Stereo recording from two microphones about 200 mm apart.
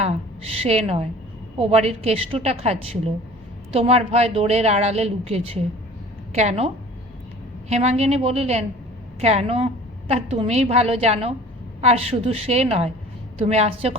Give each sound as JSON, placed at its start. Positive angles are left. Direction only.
{"t": 0.6, "sound": "speech", "side_deg": -30}
{"t": 7.7, "sound": "speech", "side_deg": -30}